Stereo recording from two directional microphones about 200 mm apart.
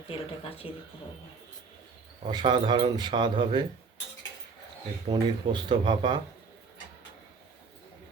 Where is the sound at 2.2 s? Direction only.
25° right (ahead or behind).